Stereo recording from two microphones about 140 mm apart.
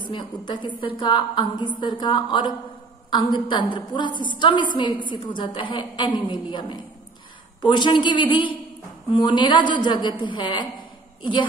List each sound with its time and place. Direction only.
0.0 s a woman's voice: 35° left (ahead or behind)